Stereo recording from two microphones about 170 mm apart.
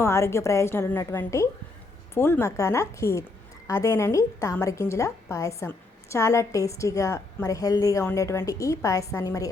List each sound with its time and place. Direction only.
0.0 s a woman's voice: 15° left (ahead or behind)